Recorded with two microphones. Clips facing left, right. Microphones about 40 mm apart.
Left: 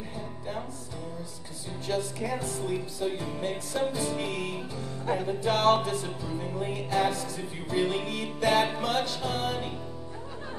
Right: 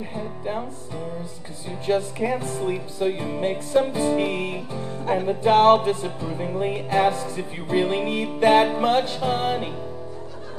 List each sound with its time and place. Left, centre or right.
1.9 s music: right